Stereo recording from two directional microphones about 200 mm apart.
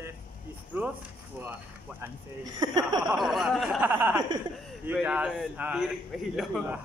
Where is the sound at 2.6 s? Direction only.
20° right (ahead or behind).